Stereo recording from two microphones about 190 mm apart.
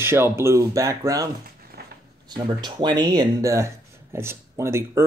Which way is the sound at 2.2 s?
20° right (ahead or behind).